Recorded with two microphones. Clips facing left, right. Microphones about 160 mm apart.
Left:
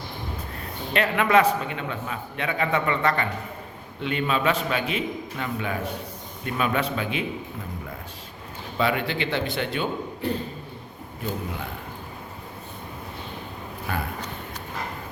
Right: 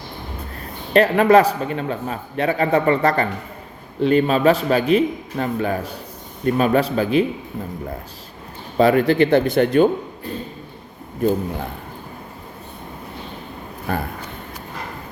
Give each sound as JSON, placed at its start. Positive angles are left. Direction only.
{"t": 0.9, "sound": "a man's voice", "side_deg": -40}
{"t": 8.8, "sound": "a man's voice", "side_deg": -40}
{"t": 10.2, "sound": "a sound", "side_deg": 70}
{"t": 13.9, "sound": "a man's voice", "side_deg": -40}